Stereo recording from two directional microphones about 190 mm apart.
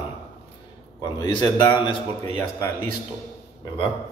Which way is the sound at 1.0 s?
20° left (ahead or behind).